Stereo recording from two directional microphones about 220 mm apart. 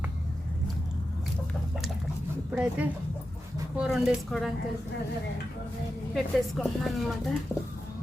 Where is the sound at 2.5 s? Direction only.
5° right (ahead or behind).